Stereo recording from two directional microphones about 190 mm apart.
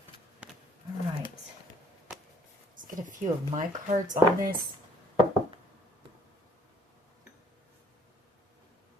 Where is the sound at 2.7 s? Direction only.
45° right (ahead or behind).